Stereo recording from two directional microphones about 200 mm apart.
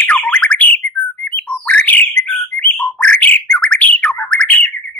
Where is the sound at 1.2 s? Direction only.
5° left (ahead or behind).